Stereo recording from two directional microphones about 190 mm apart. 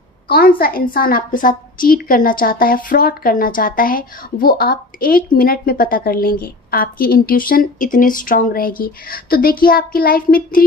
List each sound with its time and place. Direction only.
0.3 s a woman's voice: 50° left (ahead or behind)